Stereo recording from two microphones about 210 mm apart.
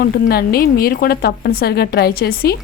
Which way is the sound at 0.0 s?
45° left (ahead or behind).